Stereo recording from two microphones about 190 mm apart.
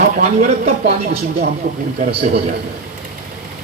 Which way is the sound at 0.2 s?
40° right (ahead or behind).